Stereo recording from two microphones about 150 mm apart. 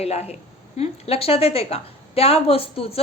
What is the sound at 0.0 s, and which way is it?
A woman's voice, 45° left (ahead or behind).